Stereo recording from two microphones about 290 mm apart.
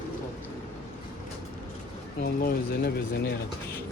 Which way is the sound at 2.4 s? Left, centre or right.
Left.